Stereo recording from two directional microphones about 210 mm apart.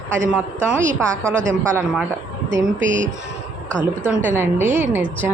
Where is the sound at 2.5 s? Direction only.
35° right (ahead or behind).